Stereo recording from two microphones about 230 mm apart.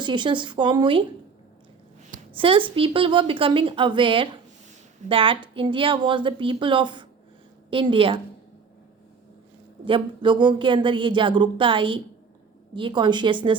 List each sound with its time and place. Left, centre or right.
0.0 s speech: centre
2.3 s speech: right
9.8 s speech: right